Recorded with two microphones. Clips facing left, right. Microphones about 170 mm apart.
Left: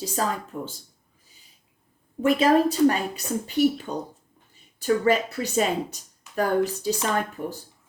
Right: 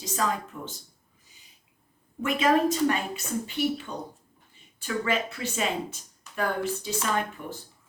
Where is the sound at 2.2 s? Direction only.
35° left (ahead or behind).